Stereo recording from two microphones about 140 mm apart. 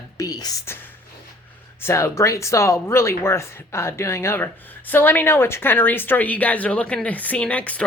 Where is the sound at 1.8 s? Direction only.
20° left (ahead or behind).